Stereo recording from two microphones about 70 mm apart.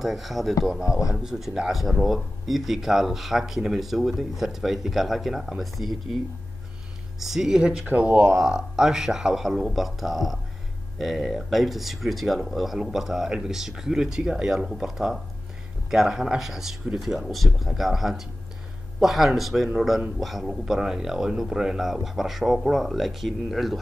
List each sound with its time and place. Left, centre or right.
0.0 s speech: centre
7.2 s speech: centre
7.9 s speech: right
8.4 s speech: centre